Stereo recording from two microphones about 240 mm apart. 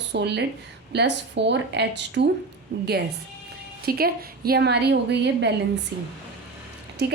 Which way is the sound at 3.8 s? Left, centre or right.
Right.